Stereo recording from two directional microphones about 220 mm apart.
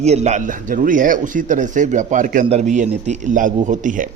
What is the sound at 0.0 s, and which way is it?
Speech, 30° right (ahead or behind).